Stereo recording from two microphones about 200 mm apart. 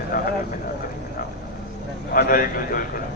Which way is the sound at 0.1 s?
45° left (ahead or behind).